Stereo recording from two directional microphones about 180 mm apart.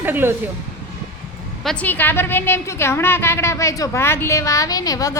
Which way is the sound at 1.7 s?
10° left (ahead or behind).